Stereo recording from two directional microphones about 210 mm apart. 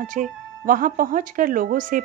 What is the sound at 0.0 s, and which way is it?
Speech, 40° right (ahead or behind).